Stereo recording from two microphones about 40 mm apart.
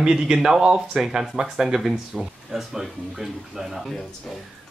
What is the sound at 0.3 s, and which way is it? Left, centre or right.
Speech, centre.